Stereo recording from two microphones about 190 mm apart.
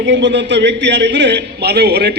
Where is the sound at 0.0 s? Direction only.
70° right (ahead or behind).